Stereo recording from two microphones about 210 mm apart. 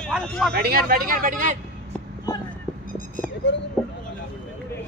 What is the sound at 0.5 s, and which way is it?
Speech, 45° right (ahead or behind).